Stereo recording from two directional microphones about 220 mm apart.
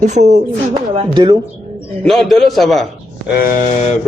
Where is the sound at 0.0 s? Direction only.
35° right (ahead or behind).